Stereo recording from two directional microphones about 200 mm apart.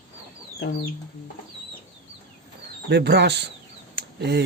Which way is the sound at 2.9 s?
55° right (ahead or behind).